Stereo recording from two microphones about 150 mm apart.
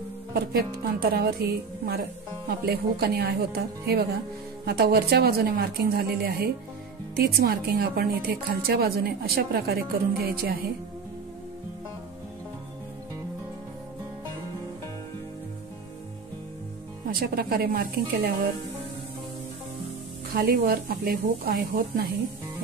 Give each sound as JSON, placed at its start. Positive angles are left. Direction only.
{"t": 0.3, "sound": "speech", "side_deg": -85}
{"t": 17.1, "sound": "speech", "side_deg": -85}
{"t": 20.3, "sound": "speech", "side_deg": -90}